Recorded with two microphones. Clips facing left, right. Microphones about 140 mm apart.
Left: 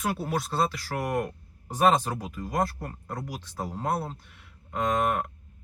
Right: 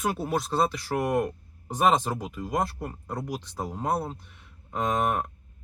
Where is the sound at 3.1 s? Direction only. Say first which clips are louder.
Right 3 dB; 20° right (ahead or behind).